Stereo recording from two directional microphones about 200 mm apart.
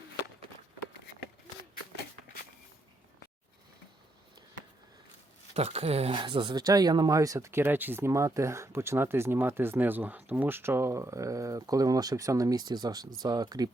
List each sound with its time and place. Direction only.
5.5 s speech: 30° right (ahead or behind)